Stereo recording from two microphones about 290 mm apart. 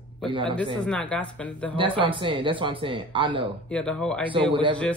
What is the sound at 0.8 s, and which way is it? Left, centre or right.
Speech, centre.